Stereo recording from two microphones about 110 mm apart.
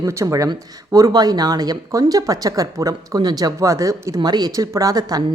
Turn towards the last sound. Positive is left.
turn(degrees=-35)  # may be behind; listen again after turning